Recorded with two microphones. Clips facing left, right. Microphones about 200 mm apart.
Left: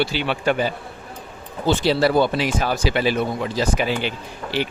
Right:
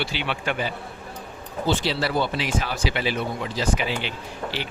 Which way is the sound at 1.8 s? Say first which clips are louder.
Left 7 dB; 45° left (ahead or behind).